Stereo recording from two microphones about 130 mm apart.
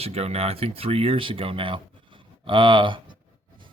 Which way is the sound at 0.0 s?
55° right (ahead or behind).